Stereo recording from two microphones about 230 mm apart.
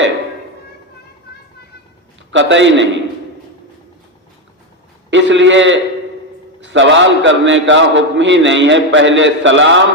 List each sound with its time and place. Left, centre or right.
2.3 s a man's voice: right
5.1 s a man's voice: right